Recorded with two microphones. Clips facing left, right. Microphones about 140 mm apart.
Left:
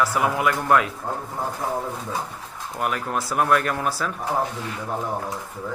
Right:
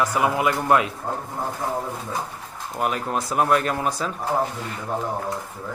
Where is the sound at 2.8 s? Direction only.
25° right (ahead or behind).